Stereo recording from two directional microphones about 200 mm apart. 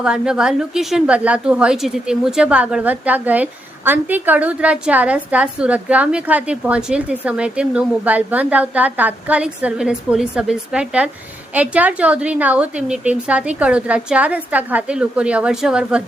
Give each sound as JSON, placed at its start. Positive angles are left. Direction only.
{"t": 0.0, "sound": "a woman's voice", "side_deg": -5}